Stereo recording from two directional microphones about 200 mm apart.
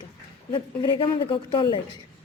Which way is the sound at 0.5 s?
25° left (ahead or behind).